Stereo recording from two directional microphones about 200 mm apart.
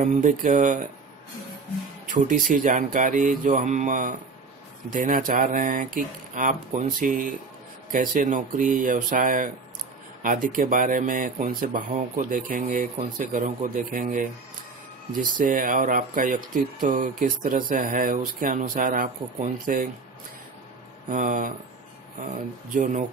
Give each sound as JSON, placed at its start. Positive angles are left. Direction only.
{"t": 0.0, "sound": "speech", "side_deg": -40}
{"t": 2.0, "sound": "speech", "side_deg": -40}
{"t": 21.1, "sound": "speech", "side_deg": -40}